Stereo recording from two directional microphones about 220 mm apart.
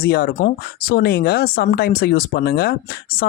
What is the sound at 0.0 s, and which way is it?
Speech, 45° left (ahead or behind).